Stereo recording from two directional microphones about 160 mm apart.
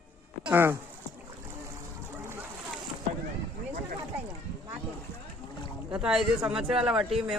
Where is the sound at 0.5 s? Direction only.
15° right (ahead or behind).